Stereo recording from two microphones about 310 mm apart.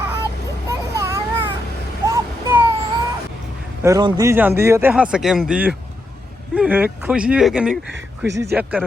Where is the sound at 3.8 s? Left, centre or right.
Centre.